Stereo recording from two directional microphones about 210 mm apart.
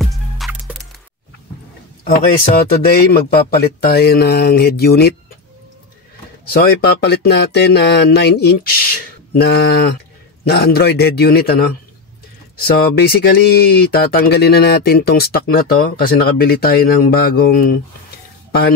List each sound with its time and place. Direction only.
0.0 s music: centre (ahead or behind)
2.0 s speech: 45° left (ahead or behind)
6.5 s speech: 50° left (ahead or behind)
12.9 s speech: 50° left (ahead or behind)